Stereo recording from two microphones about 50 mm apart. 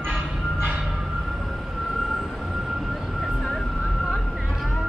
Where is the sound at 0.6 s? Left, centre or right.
Right.